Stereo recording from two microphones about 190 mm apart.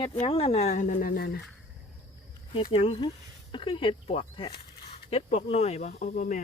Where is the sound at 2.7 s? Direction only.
30° left (ahead or behind).